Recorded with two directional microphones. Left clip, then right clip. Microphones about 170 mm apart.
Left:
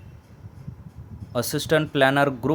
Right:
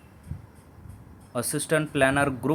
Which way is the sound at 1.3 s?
20° left (ahead or behind).